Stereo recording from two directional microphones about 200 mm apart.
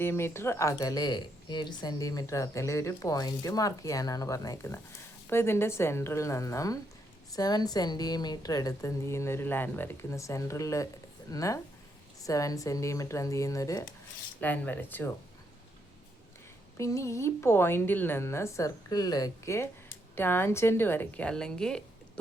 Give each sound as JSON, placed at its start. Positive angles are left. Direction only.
{"t": 0.0, "sound": "speech", "side_deg": 10}
{"t": 16.7, "sound": "speech", "side_deg": 15}